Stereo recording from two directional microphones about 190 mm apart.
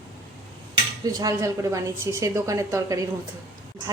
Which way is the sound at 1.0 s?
15° right (ahead or behind).